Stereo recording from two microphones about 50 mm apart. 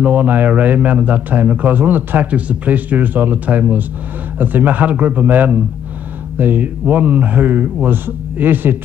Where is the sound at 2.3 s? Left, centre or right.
Right.